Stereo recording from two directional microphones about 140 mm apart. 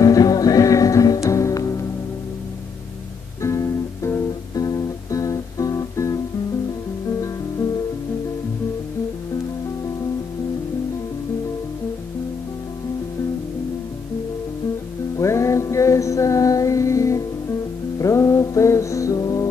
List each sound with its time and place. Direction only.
0.0 s music: 25° left (ahead or behind)
3.4 s music: 20° left (ahead or behind)
15.1 s music: 20° left (ahead or behind)